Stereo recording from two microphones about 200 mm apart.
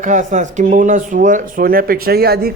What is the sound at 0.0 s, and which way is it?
A man's voice, 40° right (ahead or behind).